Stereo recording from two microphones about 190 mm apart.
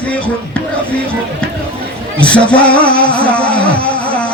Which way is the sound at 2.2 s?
5° left (ahead or behind).